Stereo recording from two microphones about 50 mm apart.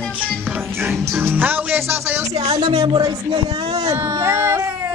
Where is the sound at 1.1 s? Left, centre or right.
Right.